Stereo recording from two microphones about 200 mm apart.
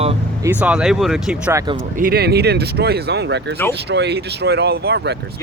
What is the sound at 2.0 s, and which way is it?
Speech, 50° right (ahead or behind).